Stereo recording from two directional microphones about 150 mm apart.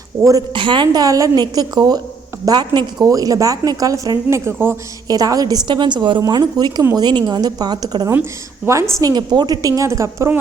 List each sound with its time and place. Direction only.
0.2 s a woman's voice: 20° right (ahead or behind)